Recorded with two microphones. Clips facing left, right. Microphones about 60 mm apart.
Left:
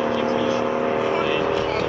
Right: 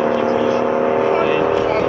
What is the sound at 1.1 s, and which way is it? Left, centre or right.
Vehicle, right.